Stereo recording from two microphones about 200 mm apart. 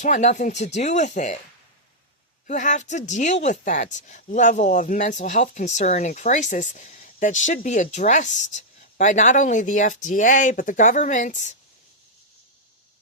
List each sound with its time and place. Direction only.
0.0 s speech: 35° left (ahead or behind)
2.5 s speech: 40° left (ahead or behind)